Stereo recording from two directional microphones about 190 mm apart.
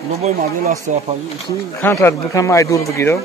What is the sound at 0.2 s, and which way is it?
Speech, 45° right (ahead or behind).